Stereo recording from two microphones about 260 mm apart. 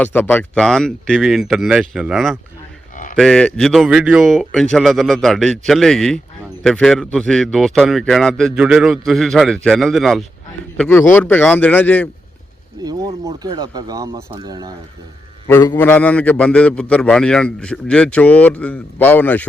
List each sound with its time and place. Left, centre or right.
0.0 s a man's voice: centre
2.9 s cattle: left
3.2 s a man's voice: centre
12.8 s speech: centre
15.4 s a man's voice: centre